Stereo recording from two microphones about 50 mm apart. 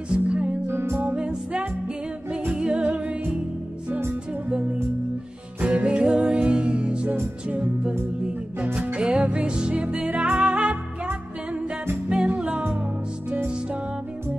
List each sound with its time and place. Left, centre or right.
0.1 s music: right
0.7 s music: right
1.1 s music: right
5.6 s music: right
12.1 s music: centre